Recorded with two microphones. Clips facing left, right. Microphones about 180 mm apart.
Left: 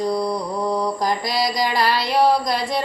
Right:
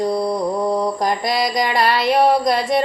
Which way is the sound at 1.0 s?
55° right (ahead or behind).